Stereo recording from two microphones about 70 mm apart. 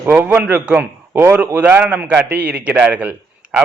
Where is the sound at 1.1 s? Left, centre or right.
Right.